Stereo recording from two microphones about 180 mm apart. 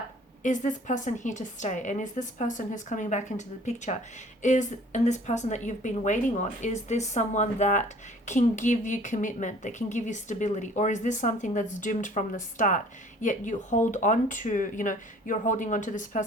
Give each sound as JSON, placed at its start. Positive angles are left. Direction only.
{"t": 0.4, "sound": "a woman's voice", "side_deg": 45}